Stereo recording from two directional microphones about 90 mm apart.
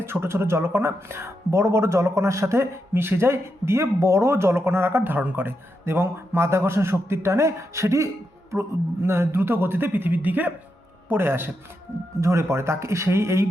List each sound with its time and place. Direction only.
0.0 s speech: 25° right (ahead or behind)